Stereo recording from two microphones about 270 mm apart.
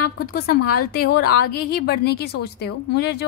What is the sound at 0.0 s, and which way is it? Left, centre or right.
A woman's voice, left.